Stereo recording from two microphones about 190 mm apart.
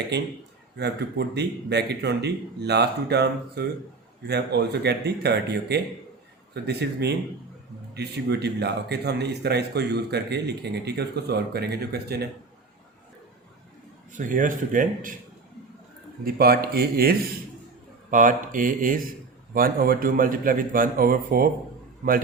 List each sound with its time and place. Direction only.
0.8 s speech: 60° right (ahead or behind)
14.2 s speech: 45° right (ahead or behind)
16.2 s speech: 55° right (ahead or behind)